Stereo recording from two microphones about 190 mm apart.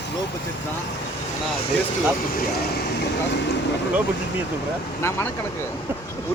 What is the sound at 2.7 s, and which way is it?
Speech, 60° left (ahead or behind).